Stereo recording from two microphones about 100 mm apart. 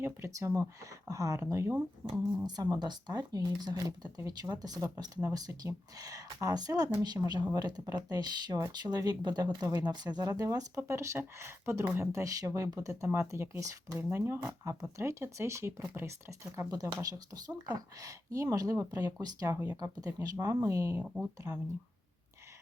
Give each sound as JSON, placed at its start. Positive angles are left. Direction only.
{"t": 0.0, "sound": "speech", "side_deg": -30}
{"t": 2.6, "sound": "speech", "side_deg": -45}